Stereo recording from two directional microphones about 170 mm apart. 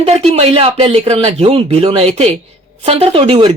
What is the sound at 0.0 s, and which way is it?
Speech, 35° right (ahead or behind).